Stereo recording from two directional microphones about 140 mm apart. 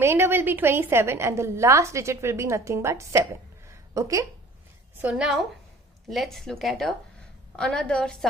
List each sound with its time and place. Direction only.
0.0 s a woman's voice: 15° right (ahead or behind)
4.9 s speech: 5° right (ahead or behind)